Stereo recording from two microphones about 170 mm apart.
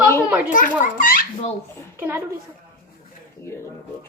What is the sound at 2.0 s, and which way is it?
Speech, 15° right (ahead or behind).